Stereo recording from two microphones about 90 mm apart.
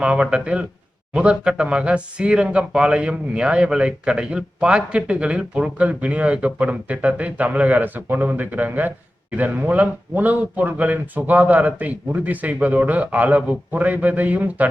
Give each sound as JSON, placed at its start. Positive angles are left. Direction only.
{"t": 0.0, "sound": "speech", "side_deg": -10}